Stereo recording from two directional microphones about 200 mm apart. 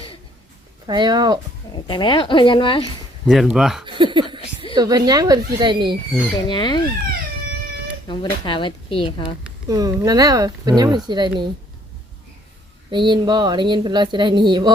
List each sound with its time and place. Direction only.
0.9 s speech: 20° right (ahead or behind)
1.7 s speech: 20° left (ahead or behind)
3.2 s speech: centre (ahead or behind)
3.8 s a sound: 25° right (ahead or behind)
4.7 s speech: 20° right (ahead or behind)
6.5 s speech: 20° left (ahead or behind)
8.0 s speech: 25° left (ahead or behind)
9.6 s speech: 20° right (ahead or behind)
12.9 s speech: 20° right (ahead or behind)